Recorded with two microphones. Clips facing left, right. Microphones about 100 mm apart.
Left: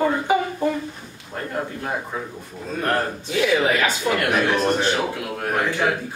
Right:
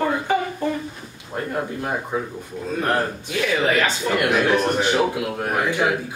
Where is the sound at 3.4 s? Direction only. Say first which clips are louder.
Left 1 dB; 10° left (ahead or behind).